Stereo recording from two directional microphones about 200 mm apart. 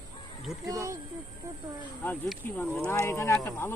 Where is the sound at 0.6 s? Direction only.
15° right (ahead or behind).